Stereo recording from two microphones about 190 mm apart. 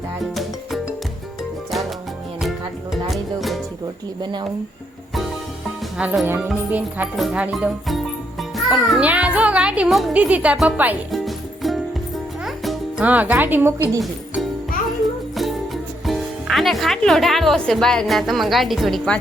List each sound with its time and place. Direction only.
0.2 s music: centre (ahead or behind)
2.4 s music: centre (ahead or behind)
4.2 s speech: 20° right (ahead or behind)
6.0 s speech: 5° right (ahead or behind)
12.5 s music: 5° right (ahead or behind)
14.0 s music: centre (ahead or behind)
15.4 s speech: centre (ahead or behind)